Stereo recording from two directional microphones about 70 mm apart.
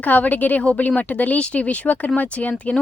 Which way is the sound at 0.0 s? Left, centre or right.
Left.